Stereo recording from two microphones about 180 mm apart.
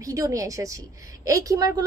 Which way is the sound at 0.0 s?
20° right (ahead or behind).